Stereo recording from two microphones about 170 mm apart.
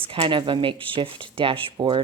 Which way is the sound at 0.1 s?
30° right (ahead or behind).